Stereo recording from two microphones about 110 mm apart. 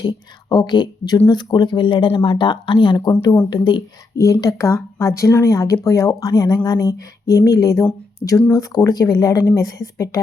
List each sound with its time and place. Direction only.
0.0 s a woman's voice: 40° left (ahead or behind)
4.2 s speech: 30° left (ahead or behind)
8.2 s speech: 5° left (ahead or behind)
8.5 s a woman's voice: 35° left (ahead or behind)